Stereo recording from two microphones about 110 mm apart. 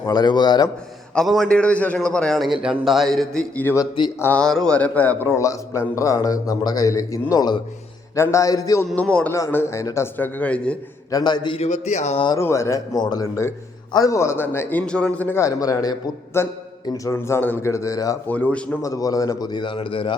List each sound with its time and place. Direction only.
0.0 s a man's voice: 40° left (ahead or behind)
1.1 s a man's voice: centre (ahead or behind)
4.0 s speech: 50° left (ahead or behind)
4.4 s a man's voice: 5° left (ahead or behind); by 7.6 s 40° left (ahead or behind)
8.1 s a man's voice: 25° left (ahead or behind)
9.0 s a man's voice: 10° left (ahead or behind)
9.5 s a man's voice: 20° left (ahead or behind)
11.1 s a man's voice: 40° left (ahead or behind)
11.5 s speech: 80° left
12.4 s a man's voice: 25° left (ahead or behind)
15.4 s a man's voice: 30° left (ahead or behind)
16.4 s a man's voice: 25° left (ahead or behind)
18.3 s a man's voice: 15° left (ahead or behind)
18.8 s a man's voice: 30° left (ahead or behind); by 20.1 s 50° left (ahead or behind)